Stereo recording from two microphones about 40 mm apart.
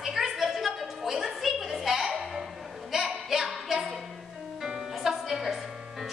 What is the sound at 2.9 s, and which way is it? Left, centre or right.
Music, centre.